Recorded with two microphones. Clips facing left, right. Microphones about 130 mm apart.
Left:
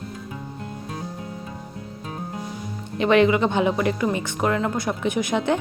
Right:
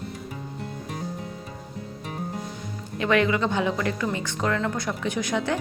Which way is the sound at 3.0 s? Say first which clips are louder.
Left 5 dB; 20° left (ahead or behind).